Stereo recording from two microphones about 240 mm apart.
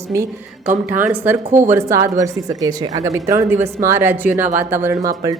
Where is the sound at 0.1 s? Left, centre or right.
Centre.